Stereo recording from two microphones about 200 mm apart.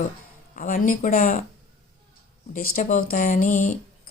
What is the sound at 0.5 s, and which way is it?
Speech, 40° left (ahead or behind).